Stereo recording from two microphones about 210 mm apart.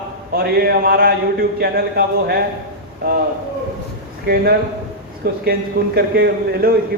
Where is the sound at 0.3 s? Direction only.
45° right (ahead or behind).